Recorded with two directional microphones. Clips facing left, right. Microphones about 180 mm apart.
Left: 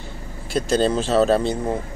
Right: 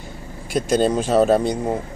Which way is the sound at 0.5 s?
15° right (ahead or behind).